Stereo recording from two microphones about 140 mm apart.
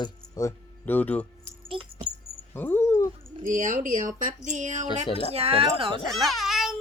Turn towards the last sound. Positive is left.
turn(degrees=0)  # may be behind; listen again after turning